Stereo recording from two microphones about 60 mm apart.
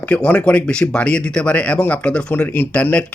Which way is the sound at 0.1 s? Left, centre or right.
Left.